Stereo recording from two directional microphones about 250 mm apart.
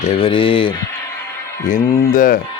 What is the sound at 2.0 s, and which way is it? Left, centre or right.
Speech, left.